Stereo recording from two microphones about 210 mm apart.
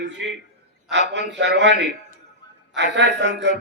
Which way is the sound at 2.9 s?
55° right (ahead or behind).